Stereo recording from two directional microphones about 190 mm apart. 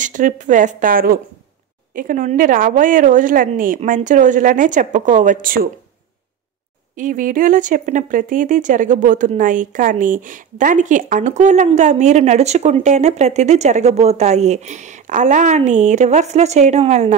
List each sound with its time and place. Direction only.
0.0 s a woman's voice: 45° right (ahead or behind)
7.0 s speech: 45° right (ahead or behind)